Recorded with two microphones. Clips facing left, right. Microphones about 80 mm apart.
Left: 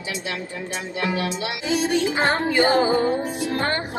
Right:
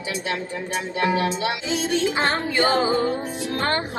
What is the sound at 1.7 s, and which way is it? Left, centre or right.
Music, left.